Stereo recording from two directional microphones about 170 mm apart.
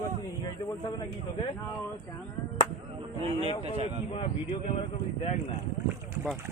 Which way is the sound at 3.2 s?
35° right (ahead or behind).